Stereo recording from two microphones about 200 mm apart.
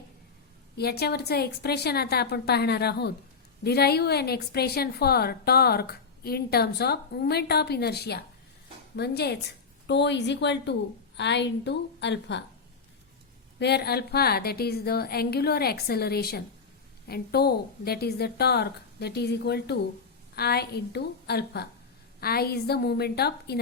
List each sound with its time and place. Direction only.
0.8 s a woman's voice: 50° left (ahead or behind)
13.6 s a woman's voice: 55° left (ahead or behind)